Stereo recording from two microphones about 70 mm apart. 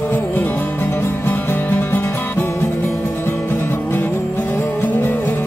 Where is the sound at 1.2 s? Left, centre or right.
Left.